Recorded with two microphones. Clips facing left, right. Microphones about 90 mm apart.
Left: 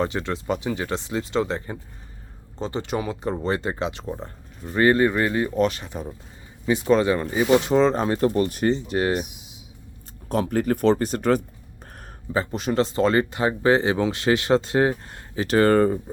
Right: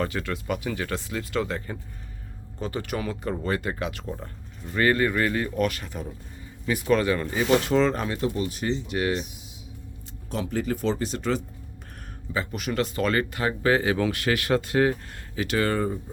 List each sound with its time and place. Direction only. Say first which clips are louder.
0.0 s speech: left 3 dB; 20° left (ahead or behind)
8.2 s speech: left 7 dB; 50° left (ahead or behind)
8.9 s speech: left 3 dB; 35° left (ahead or behind)
10.2 s speech: left 6 dB; 50° left (ahead or behind)
12.3 s speech: left 5 dB; 30° left (ahead or behind)
15.4 s speech: left 6 dB; 35° left (ahead or behind)
15.7 s speech: left 8 dB; 55° left (ahead or behind)